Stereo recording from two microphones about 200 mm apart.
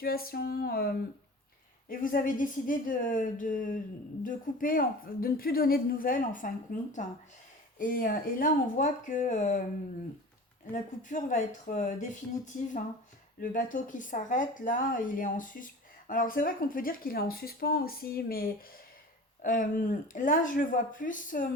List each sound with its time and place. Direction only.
0.0 s speech: 50° left (ahead or behind)
10.7 s speech: 40° left (ahead or behind)
13.4 s speech: 40° left (ahead or behind)